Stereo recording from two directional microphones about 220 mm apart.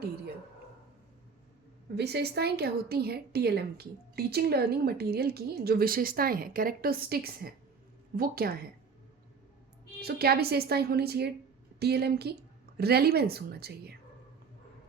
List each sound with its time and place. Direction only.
2.0 s a woman's voice: 50° right (ahead or behind)
10.0 s a woman's voice: 45° right (ahead or behind)